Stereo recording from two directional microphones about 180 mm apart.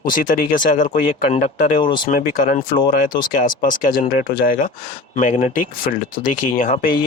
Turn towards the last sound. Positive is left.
turn(degrees=45)  # may be behind; listen again after turning